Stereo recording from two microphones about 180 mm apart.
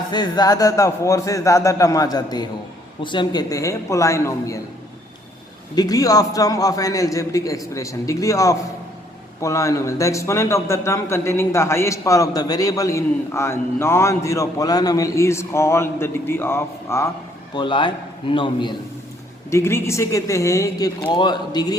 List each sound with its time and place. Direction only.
0.1 s a man's voice: 25° left (ahead or behind)
5.7 s a man's voice: 20° left (ahead or behind)
17.5 s a man's voice: 25° left (ahead or behind)
19.5 s a man's voice: 15° left (ahead or behind)